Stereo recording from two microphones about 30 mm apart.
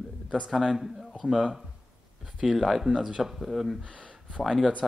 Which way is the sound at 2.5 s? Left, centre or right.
Centre.